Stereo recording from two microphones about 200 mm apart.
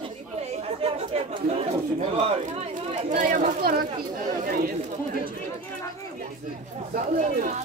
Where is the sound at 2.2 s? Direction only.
30° right (ahead or behind).